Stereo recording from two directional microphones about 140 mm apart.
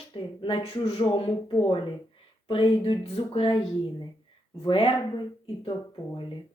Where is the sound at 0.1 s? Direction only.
40° left (ahead or behind).